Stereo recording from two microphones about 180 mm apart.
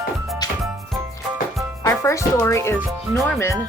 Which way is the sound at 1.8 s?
15° left (ahead or behind).